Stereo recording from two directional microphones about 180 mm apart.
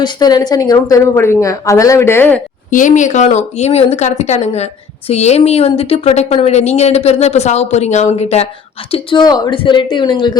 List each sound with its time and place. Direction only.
0.0 s a woman's voice: 20° left (ahead or behind)
2.6 s a woman's voice: 45° left (ahead or behind); by 10.3 s 25° left (ahead or behind)